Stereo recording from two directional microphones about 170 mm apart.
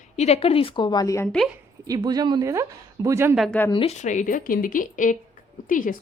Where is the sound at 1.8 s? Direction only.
20° right (ahead or behind).